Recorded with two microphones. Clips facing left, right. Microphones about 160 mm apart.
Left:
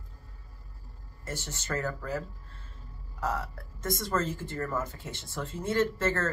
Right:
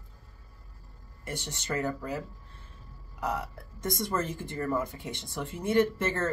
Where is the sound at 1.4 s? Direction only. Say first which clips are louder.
Right 2 dB; 15° right (ahead or behind).